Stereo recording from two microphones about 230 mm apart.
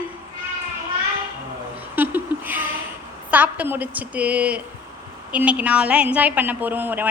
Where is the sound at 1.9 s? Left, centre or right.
Centre.